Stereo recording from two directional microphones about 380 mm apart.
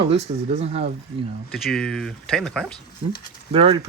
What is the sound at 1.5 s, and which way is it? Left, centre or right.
A man's voice, centre.